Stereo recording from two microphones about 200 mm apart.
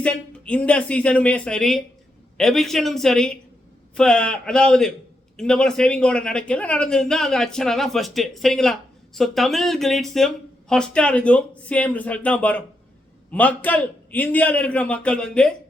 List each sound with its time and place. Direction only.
0.0 s a man's voice: 5° left (ahead or behind)